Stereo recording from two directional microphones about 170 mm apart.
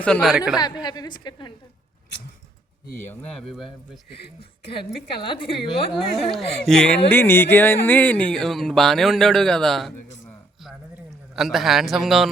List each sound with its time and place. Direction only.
0.0 s speech: 5° left (ahead or behind)
0.6 s a woman's voice: 25° left (ahead or behind)
3.0 s speech: 10° left (ahead or behind)
4.4 s a woman's voice: 30° left (ahead or behind)
5.9 s speech: centre (ahead or behind)
11.3 s speech: centre (ahead or behind)